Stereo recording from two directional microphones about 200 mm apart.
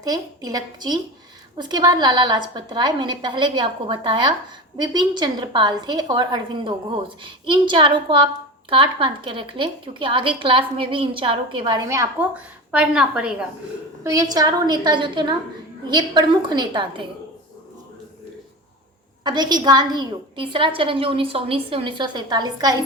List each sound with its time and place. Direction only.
0.0 s a woman's voice: 20° right (ahead or behind)
14.0 s a woman's voice: 15° right (ahead or behind)
19.2 s a woman's voice: 20° right (ahead or behind)